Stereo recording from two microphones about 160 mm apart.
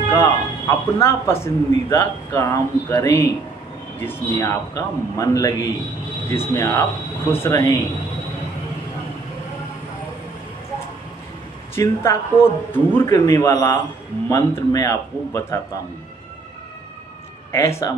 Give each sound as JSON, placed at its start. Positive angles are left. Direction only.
{"t": 0.1, "sound": "a man's voice", "side_deg": 15}
{"t": 4.4, "sound": "a man's voice", "side_deg": 20}
{"t": 11.7, "sound": "a man's voice", "side_deg": 15}
{"t": 17.5, "sound": "a man's voice", "side_deg": 20}